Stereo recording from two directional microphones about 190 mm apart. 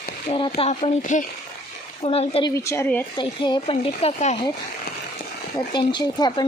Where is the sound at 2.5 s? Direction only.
15° left (ahead or behind).